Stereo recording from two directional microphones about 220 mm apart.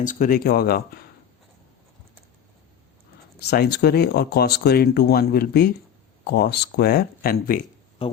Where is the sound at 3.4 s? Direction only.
45° left (ahead or behind).